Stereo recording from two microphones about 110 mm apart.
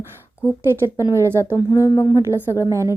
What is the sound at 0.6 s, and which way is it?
Speech, 20° right (ahead or behind).